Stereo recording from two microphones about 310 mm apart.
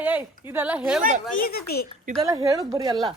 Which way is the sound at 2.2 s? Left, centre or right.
Centre.